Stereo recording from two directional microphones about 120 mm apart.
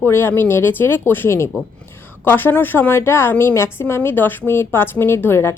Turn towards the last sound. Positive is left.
turn(degrees=20)  # may be behind; listen again after turning